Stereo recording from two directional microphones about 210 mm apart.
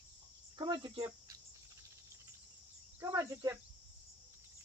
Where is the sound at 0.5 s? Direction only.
20° right (ahead or behind).